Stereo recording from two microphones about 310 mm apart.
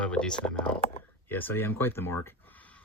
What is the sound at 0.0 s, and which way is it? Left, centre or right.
Speech, centre.